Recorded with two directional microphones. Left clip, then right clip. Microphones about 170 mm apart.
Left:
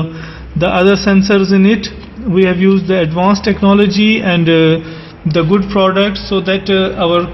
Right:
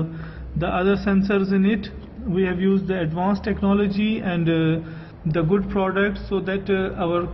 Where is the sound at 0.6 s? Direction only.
30° left (ahead or behind).